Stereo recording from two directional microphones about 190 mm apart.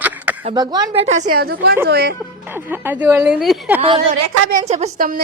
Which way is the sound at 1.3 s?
55° right (ahead or behind).